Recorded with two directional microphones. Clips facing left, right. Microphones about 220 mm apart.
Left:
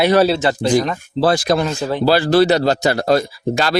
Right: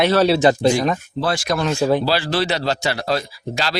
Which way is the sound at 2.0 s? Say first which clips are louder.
Left 7 dB; 45° left (ahead or behind).